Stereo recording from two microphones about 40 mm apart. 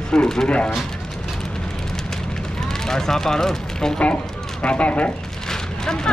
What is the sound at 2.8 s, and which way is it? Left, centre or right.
Speech, centre.